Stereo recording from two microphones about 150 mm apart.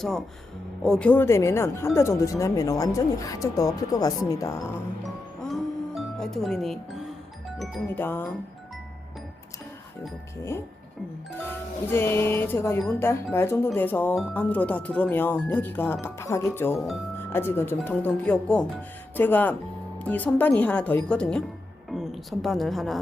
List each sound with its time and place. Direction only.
0.0 s speech: 5° left (ahead or behind); by 4.5 s 20° left (ahead or behind)
5.0 s music: centre (ahead or behind)
7.9 s speech: 15° left (ahead or behind)
11.4 s a woman's voice: 15° left (ahead or behind)